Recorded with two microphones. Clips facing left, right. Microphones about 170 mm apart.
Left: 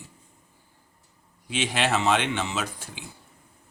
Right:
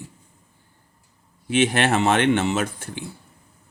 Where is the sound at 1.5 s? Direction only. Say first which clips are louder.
Right 6 dB; 55° right (ahead or behind).